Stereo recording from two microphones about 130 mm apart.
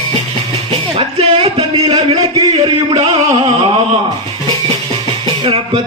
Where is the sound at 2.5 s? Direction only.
55° right (ahead or behind).